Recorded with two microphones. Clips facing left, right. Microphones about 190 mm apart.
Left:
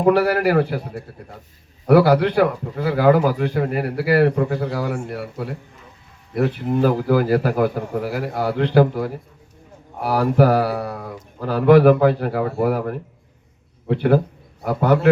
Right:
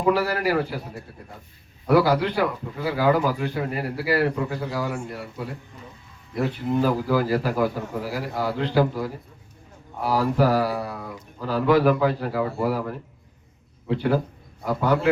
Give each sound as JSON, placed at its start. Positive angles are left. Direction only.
{"t": 0.0, "sound": "a man's voice", "side_deg": 60}
{"t": 1.9, "sound": "a man's voice", "side_deg": 55}